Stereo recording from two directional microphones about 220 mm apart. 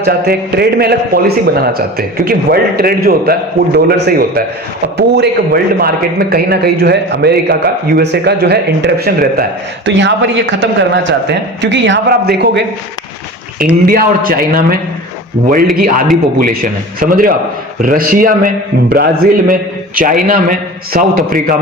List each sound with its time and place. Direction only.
0.0 s a man's voice: 45° right (ahead or behind)
13.8 s a man's voice: 40° right (ahead or behind)